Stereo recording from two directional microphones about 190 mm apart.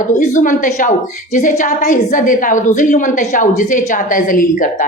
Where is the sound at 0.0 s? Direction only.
40° left (ahead or behind).